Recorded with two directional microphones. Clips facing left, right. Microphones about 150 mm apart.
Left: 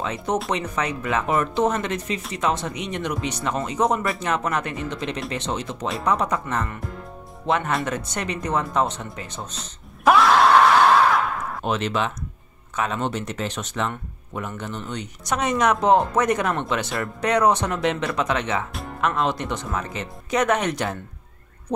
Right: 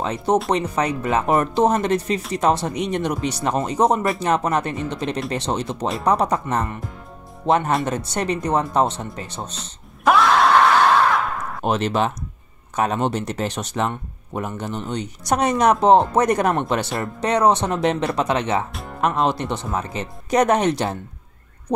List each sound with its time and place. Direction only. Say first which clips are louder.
0.5 s speech: right 4 dB; 35° right (ahead or behind)
9.6 s a sound: right 1 dB; centre (ahead or behind)
11.6 s speech: right 4 dB; 40° right (ahead or behind)
17.0 s speech: right 1 dB; 25° right (ahead or behind)